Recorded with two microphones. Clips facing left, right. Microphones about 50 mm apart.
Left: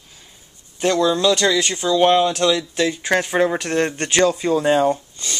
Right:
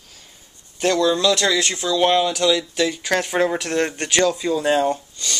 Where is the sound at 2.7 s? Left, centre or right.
Left.